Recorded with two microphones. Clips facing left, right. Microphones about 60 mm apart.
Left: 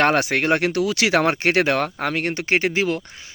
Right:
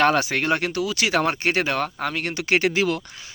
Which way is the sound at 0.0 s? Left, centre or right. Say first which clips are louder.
Left 1 dB; left.